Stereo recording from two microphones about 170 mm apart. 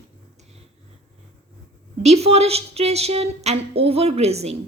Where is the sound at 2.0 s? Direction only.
40° right (ahead or behind).